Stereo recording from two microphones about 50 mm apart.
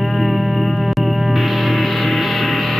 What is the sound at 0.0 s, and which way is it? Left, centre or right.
Music, centre.